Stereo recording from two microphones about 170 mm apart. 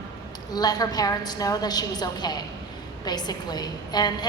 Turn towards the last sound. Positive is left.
turn(degrees=25)  # may be behind; listen again after turning